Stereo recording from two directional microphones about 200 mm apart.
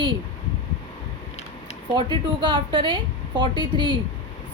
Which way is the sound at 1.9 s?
25° right (ahead or behind).